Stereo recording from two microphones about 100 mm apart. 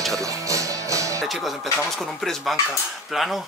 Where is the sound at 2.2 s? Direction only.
Centre (ahead or behind).